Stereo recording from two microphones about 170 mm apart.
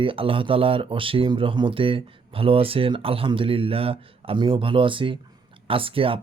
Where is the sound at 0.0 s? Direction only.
30° right (ahead or behind).